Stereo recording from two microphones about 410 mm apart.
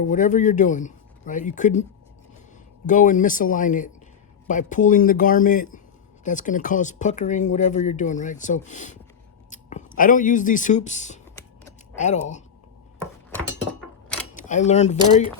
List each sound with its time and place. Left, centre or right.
0.1 s speech: centre
14.3 s speech: centre